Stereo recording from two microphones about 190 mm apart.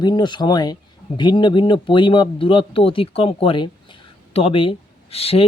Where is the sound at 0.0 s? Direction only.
20° left (ahead or behind).